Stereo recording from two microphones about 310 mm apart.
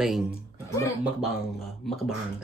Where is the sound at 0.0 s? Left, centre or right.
Centre.